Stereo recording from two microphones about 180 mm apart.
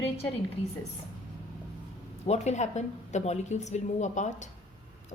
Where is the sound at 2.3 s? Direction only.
40° left (ahead or behind).